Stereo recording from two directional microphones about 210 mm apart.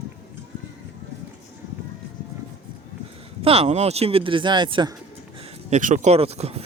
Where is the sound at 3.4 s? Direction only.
30° right (ahead or behind).